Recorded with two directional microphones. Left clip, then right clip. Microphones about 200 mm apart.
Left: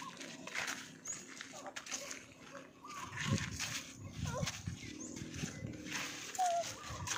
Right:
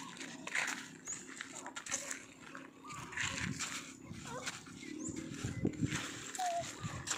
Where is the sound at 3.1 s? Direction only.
45° right (ahead or behind).